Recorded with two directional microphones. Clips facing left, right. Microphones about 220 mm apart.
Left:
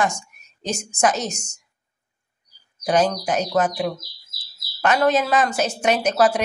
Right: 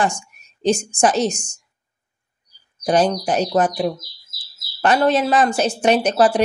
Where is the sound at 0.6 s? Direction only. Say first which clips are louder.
Right 6 dB; 30° right (ahead or behind).